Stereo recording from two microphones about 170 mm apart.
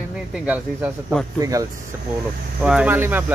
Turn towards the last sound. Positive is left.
turn(degrees=-10)  # may be behind; listen again after turning